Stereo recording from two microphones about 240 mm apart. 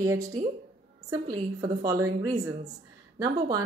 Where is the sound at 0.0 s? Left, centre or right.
Centre.